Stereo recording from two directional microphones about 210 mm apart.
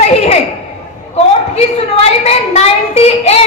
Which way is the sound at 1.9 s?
30° left (ahead or behind).